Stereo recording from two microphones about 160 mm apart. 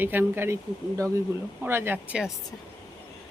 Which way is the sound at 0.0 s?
15° right (ahead or behind).